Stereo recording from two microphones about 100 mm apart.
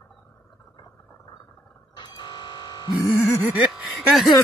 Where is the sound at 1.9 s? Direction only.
45° left (ahead or behind).